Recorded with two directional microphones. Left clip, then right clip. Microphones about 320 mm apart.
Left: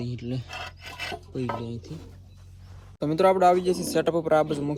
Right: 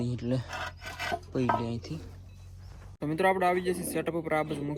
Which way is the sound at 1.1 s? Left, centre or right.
Centre.